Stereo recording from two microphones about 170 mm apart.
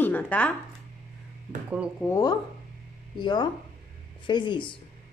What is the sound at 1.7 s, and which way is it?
Speech, 5° right (ahead or behind).